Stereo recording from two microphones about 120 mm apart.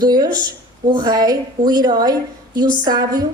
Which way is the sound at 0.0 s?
35° right (ahead or behind).